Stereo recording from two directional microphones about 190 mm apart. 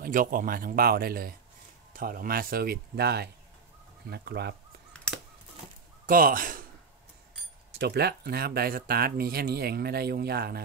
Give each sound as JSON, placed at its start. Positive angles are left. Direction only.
{"t": 0.0, "sound": "speech", "side_deg": -45}
{"t": 4.9, "sound": "honk", "side_deg": 5}
{"t": 6.0, "sound": "a man's voice", "side_deg": -50}
{"t": 7.8, "sound": "speech", "side_deg": -55}